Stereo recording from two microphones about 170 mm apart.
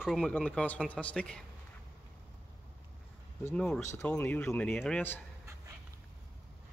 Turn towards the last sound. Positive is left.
turn(degrees=10)  # may be behind; listen again after turning